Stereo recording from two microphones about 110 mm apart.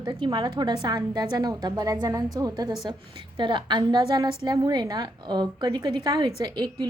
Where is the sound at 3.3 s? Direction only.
45° right (ahead or behind).